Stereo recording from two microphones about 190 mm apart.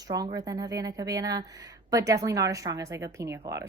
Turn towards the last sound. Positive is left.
turn(degrees=-15)  # may be behind; listen again after turning